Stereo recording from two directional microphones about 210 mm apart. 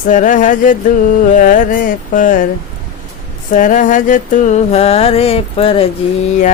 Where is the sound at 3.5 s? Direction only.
40° left (ahead or behind).